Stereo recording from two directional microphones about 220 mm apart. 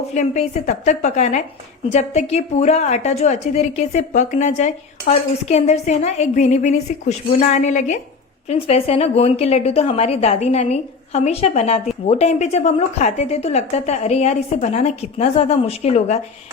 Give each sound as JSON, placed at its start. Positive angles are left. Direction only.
{"t": 0.1, "sound": "a woman's voice", "side_deg": 30}